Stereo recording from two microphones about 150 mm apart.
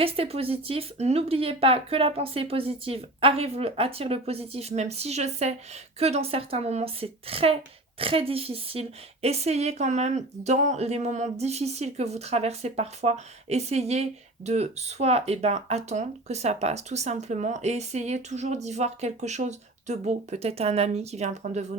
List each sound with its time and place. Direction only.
0.0 s a woman's voice: 40° right (ahead or behind)